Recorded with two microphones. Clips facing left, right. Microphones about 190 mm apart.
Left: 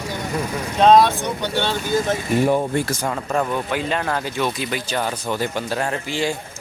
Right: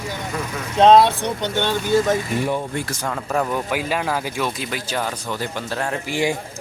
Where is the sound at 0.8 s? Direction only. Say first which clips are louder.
Right 1 dB; 25° right (ahead or behind).